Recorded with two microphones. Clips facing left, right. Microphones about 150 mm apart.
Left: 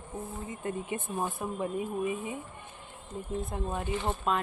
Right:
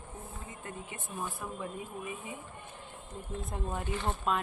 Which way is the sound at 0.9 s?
20° left (ahead or behind).